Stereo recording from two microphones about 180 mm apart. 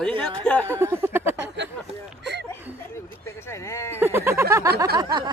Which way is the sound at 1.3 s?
75° right (ahead or behind).